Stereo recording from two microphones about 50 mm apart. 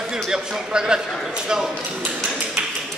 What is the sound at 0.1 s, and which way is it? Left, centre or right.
Speech, centre.